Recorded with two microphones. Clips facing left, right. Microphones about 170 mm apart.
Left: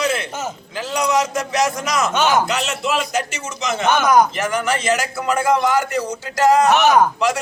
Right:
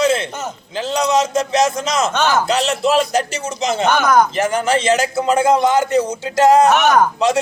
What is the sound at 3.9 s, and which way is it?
Speech, 5° left (ahead or behind).